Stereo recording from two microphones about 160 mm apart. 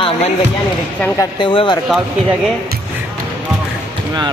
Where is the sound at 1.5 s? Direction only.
35° left (ahead or behind).